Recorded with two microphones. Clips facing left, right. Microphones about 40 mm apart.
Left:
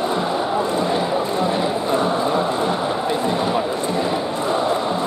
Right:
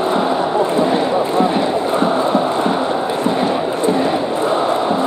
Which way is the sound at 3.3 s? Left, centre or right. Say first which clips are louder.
Right 3 dB; centre.